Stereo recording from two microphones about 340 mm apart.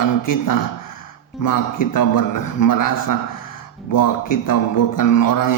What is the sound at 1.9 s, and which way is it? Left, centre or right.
A man's voice, left.